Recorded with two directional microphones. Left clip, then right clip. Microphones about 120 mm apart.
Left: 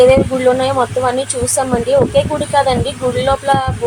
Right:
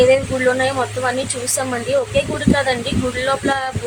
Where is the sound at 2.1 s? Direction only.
15° left (ahead or behind).